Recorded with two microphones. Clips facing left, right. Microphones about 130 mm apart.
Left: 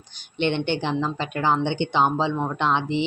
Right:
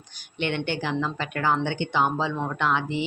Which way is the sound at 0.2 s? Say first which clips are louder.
Left 4 dB; 25° left (ahead or behind).